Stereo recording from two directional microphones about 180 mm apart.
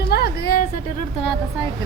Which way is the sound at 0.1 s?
60° left (ahead or behind).